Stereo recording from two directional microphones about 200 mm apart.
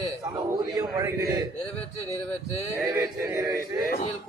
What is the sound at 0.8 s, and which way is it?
Speech, 15° right (ahead or behind).